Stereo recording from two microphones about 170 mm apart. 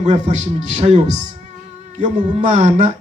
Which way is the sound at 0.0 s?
45° right (ahead or behind).